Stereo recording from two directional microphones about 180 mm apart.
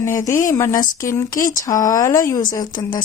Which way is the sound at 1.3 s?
50° left (ahead or behind).